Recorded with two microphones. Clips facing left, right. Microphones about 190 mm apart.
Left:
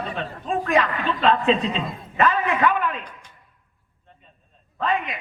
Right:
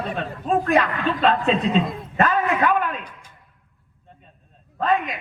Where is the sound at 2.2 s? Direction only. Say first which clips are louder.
Even; 40° right (ahead or behind).